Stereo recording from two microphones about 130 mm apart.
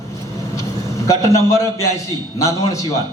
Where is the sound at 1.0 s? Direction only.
25° left (ahead or behind).